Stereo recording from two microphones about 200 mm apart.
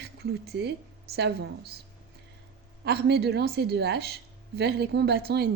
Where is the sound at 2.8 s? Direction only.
55° right (ahead or behind).